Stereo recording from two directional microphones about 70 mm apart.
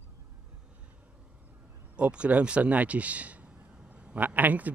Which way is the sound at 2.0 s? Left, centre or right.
Centre.